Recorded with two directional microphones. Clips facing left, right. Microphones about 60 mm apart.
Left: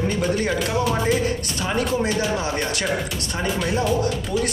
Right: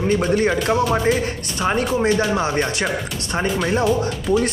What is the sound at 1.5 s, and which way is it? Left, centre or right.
Speech, right.